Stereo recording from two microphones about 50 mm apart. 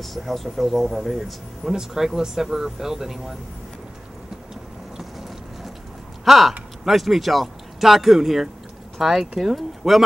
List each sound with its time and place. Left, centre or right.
0.0 s speech: centre
6.2 s speech: centre